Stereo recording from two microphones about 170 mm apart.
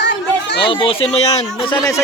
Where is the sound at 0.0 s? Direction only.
90° left.